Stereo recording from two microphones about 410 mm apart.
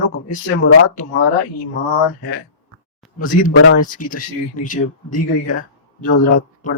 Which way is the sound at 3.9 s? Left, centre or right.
Centre.